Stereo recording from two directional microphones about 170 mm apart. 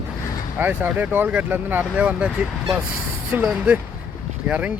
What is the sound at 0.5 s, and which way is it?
Speech, 10° right (ahead or behind).